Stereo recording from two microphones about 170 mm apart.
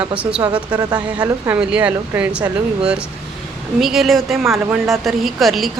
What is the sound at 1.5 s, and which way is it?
Speech, 5° right (ahead or behind).